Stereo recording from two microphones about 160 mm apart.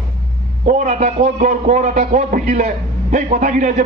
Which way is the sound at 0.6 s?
50° right (ahead or behind).